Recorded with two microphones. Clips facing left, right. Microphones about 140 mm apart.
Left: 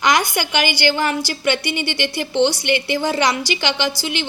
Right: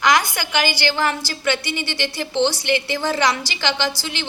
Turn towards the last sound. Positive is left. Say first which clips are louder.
# left 2 dB
turn(degrees=15)  # may be behind; listen again after turning